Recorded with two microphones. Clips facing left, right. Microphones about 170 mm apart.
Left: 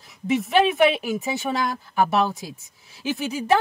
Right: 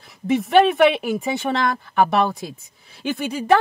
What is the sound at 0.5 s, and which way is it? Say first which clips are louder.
Speech: right 4 dB; 60° right (ahead or behind).